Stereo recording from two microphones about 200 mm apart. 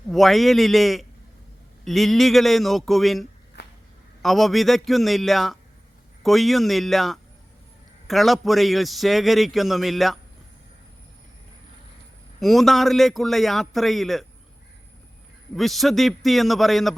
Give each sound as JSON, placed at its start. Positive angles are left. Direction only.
{"t": 0.1, "sound": "a man's voice", "side_deg": 0}
{"t": 3.6, "sound": "a sound", "side_deg": 55}
{"t": 4.2, "sound": "a man's voice", "side_deg": 0}
{"t": 12.4, "sound": "a man's voice", "side_deg": 0}
{"t": 15.5, "sound": "a man's voice", "side_deg": 0}